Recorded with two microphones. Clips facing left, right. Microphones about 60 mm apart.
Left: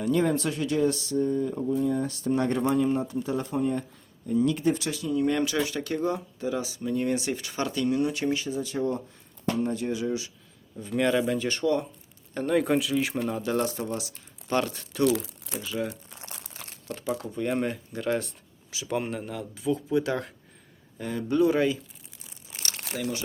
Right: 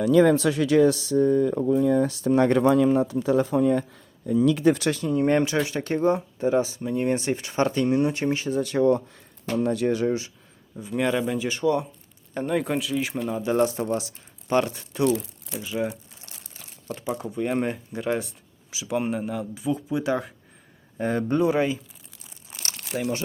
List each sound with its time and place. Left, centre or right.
0.0 s speech: right
4.9 s speech: right
8.4 s speech: right
10.0 s speech: right
10.8 s speech: centre
12.5 s speech: centre
13.4 s speech: centre
14.5 s speech: centre
15.0 s speech: left
15.6 s speech: right
16.3 s a sound: left
17.2 s speech: centre
21.0 s speech: right
21.2 s speech: right